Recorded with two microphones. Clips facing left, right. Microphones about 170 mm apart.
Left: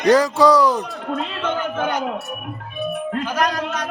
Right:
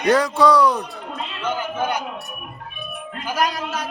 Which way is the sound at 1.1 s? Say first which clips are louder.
Left 4 dB; 55° left (ahead or behind).